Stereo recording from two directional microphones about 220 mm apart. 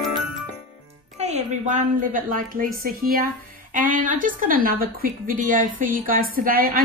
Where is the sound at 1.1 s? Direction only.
30° right (ahead or behind).